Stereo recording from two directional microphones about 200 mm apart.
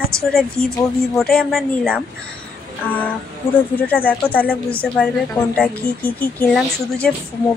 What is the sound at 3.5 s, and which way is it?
Speech, 10° left (ahead or behind).